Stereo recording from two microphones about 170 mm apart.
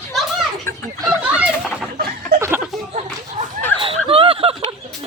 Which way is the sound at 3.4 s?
50° right (ahead or behind).